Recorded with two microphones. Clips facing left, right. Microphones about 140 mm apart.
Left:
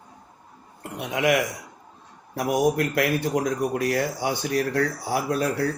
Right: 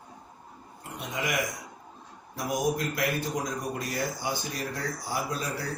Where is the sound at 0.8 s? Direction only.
65° left (ahead or behind).